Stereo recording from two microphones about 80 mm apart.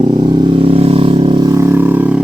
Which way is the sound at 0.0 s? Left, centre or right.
Right.